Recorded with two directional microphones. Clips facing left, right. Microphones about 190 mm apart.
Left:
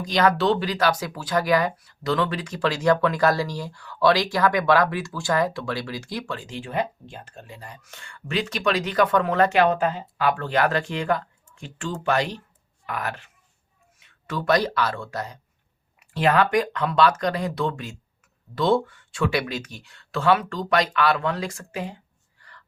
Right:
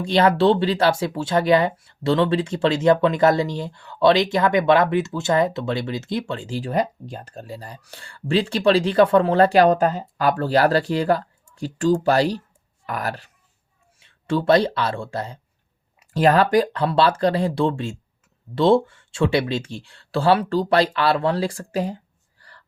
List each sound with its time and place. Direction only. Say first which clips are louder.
0.0 s speech: right 4 dB; 30° right (ahead or behind)
16.1 s speech: right 4 dB; 40° right (ahead or behind)
22.4 s a sound: right 1 dB; 35° right (ahead or behind)